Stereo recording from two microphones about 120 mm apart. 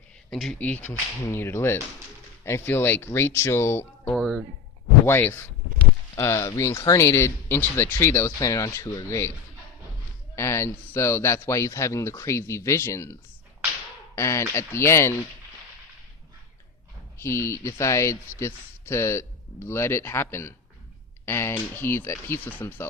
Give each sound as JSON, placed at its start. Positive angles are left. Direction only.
{"t": 0.3, "sound": "speech", "side_deg": 0}
{"t": 0.6, "sound": "speech", "side_deg": 10}
{"t": 4.1, "sound": "speech", "side_deg": 0}
{"t": 5.0, "sound": "speech", "side_deg": 20}
{"t": 10.3, "sound": "speech", "side_deg": 25}
{"t": 14.2, "sound": "speech", "side_deg": 25}
{"t": 17.2, "sound": "speech", "side_deg": 25}